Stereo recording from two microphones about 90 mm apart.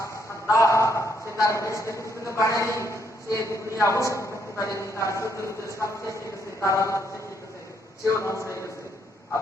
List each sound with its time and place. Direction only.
0.0 s a man's voice: 35° left (ahead or behind)
8.0 s a man's voice: 35° left (ahead or behind)